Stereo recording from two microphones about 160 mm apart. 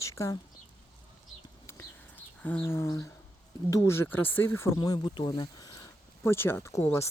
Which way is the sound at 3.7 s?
15° left (ahead or behind).